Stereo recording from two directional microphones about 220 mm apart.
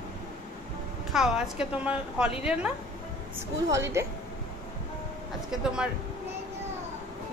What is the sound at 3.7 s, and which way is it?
Speech, 15° right (ahead or behind).